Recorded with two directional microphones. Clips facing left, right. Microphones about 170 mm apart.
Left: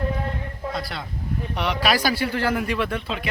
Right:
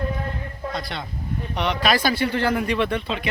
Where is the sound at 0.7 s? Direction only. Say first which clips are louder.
Even; 5° left (ahead or behind).